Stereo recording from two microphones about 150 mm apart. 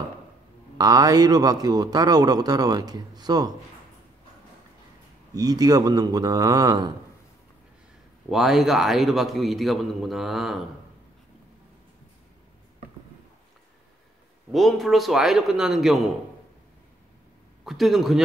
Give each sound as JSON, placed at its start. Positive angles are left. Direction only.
{"t": 0.7, "sound": "a man's voice", "side_deg": -25}
{"t": 5.3, "sound": "a man's voice", "side_deg": -25}
{"t": 8.3, "sound": "a man's voice", "side_deg": 0}
{"t": 14.5, "sound": "a man's voice", "side_deg": 0}
{"t": 17.6, "sound": "a man's voice", "side_deg": 0}